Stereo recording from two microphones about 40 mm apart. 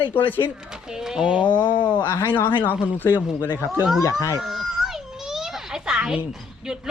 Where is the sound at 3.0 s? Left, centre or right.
Left.